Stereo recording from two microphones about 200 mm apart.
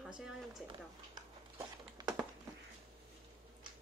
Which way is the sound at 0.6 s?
20° right (ahead or behind).